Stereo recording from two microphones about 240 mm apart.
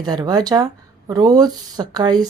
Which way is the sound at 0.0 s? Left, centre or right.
Centre.